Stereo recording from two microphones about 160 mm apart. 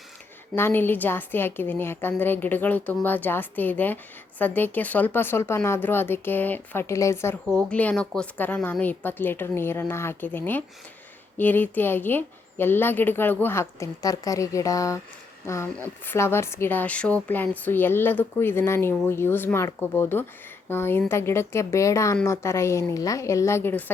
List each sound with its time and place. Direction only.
0.5 s a woman's voice: 15° left (ahead or behind)